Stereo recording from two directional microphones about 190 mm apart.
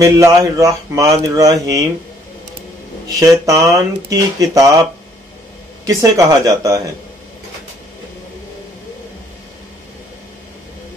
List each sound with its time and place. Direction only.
0.0 s speech: 15° right (ahead or behind)
3.2 s speech: 15° right (ahead or behind)
5.9 s speech: 20° right (ahead or behind)